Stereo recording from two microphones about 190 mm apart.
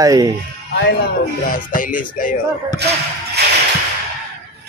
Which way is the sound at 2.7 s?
60° right (ahead or behind).